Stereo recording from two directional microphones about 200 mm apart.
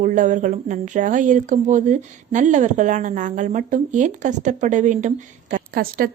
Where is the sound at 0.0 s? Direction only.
40° right (ahead or behind).